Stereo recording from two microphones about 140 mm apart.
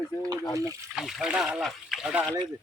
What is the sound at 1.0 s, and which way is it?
Speech, 5° right (ahead or behind).